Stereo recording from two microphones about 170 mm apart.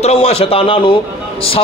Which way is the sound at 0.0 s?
35° left (ahead or behind).